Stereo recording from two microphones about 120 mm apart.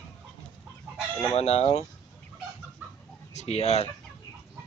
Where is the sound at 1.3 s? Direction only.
60° left (ahead or behind).